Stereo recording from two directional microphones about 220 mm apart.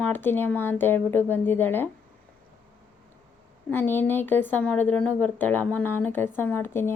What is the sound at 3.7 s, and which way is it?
Speech, 10° left (ahead or behind).